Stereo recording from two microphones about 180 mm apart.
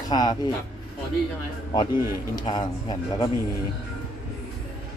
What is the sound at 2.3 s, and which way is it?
Speech, 25° left (ahead or behind).